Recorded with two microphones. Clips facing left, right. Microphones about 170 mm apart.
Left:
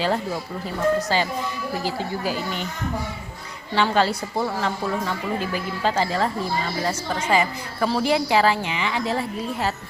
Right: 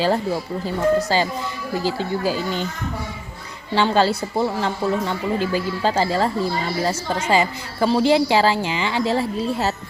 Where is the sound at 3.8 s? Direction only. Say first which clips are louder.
Right 3 dB; 30° right (ahead or behind).